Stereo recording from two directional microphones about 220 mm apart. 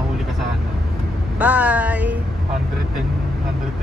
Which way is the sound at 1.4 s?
5° right (ahead or behind).